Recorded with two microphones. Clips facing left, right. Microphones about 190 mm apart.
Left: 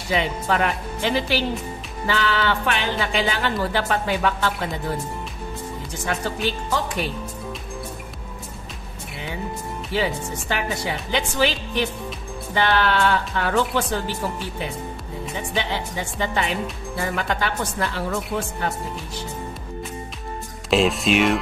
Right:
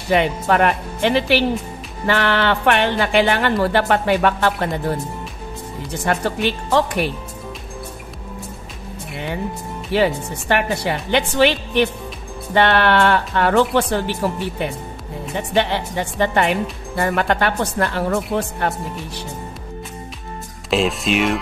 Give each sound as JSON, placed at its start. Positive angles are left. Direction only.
{"t": 0.1, "sound": "speech", "side_deg": -60}
{"t": 6.0, "sound": "speech", "side_deg": -65}
{"t": 9.9, "sound": "speech", "side_deg": -65}
{"t": 20.7, "sound": "speech", "side_deg": 0}